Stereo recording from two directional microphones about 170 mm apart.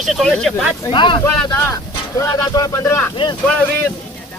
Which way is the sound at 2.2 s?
20° left (ahead or behind).